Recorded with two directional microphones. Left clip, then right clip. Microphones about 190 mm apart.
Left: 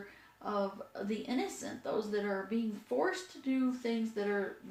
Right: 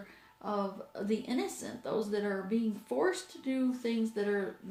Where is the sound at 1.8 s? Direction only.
50° right (ahead or behind).